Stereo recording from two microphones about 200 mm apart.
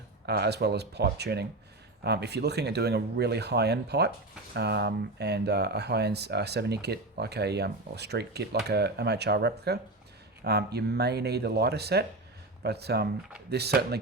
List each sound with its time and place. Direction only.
0.3 s speech: 55° right (ahead or behind)